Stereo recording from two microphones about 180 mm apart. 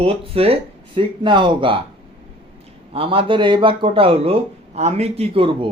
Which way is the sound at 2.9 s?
30° right (ahead or behind).